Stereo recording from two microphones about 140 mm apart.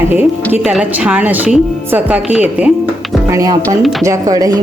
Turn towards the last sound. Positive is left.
turn(degrees=-25)  # may be behind; listen again after turning